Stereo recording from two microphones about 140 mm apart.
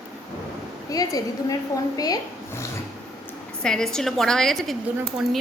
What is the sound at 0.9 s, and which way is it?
A woman's voice, 25° left (ahead or behind).